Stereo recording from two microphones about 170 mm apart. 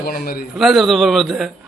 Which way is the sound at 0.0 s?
60° left (ahead or behind).